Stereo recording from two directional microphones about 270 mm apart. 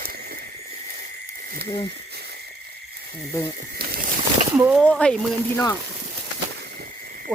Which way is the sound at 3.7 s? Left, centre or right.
Right.